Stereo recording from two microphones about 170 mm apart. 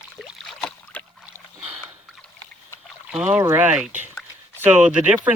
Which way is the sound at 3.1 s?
5° right (ahead or behind).